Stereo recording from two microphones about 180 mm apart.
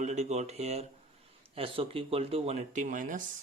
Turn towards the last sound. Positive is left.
turn(degrees=-45)  # may be behind; listen again after turning